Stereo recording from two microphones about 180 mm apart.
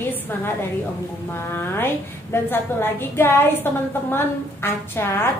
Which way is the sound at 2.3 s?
10° left (ahead or behind).